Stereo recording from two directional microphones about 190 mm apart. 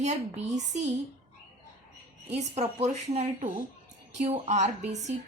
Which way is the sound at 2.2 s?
35° right (ahead or behind).